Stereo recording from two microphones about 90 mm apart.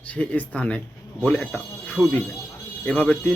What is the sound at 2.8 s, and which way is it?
Speech, 10° left (ahead or behind).